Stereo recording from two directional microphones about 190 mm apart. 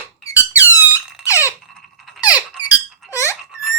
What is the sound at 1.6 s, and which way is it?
Squeak, centre (ahead or behind).